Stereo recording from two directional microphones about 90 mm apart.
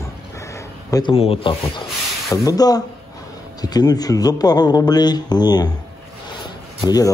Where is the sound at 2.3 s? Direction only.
40° left (ahead or behind).